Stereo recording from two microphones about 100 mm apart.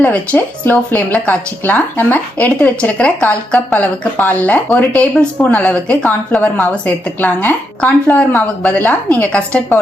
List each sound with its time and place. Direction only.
0.0 s speech: 15° left (ahead or behind)